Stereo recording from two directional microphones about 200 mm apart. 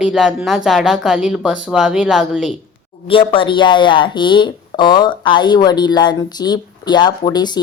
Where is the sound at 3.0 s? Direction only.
25° left (ahead or behind).